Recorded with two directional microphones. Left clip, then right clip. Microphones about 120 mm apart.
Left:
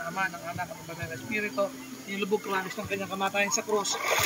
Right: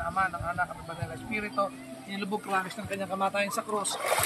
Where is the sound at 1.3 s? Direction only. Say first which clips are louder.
Left 1 dB; 20° right (ahead or behind).